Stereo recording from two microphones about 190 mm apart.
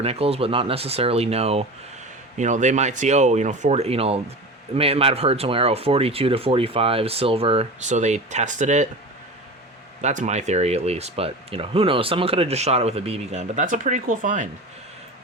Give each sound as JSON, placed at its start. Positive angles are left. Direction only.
{"t": 0.0, "sound": "speech", "side_deg": -30}
{"t": 10.0, "sound": "speech", "side_deg": -40}